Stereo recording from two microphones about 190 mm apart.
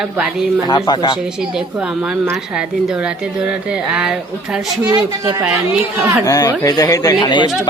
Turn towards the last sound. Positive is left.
turn(degrees=25)  # may be behind; listen again after turning